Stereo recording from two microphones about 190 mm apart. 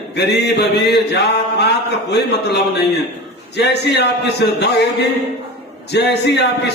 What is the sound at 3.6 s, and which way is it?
A man's voice, 60° left (ahead or behind).